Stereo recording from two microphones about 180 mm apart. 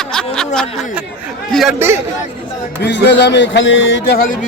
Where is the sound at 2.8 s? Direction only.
70° left (ahead or behind); by 4.2 s 90° left.